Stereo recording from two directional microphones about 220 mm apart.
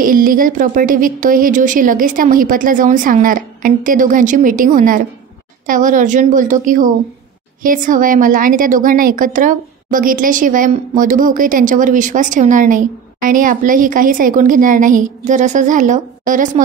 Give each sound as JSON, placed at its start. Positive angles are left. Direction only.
{"t": 0.0, "sound": "speech", "side_deg": -40}